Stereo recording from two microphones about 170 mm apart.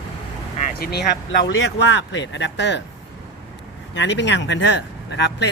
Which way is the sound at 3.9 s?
90° left.